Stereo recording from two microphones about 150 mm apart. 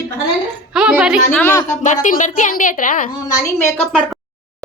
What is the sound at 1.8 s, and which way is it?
A woman's voice, 55° left (ahead or behind).